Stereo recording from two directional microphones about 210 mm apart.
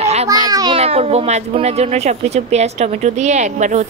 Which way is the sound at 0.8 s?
30° right (ahead or behind).